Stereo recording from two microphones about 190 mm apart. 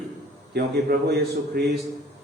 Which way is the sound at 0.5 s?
60° right (ahead or behind).